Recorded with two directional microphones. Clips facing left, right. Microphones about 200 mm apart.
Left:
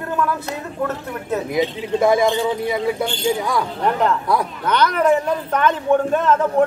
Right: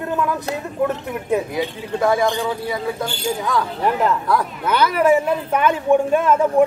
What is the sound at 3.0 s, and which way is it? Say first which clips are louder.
Speech: left 3 dB; 10° right (ahead or behind).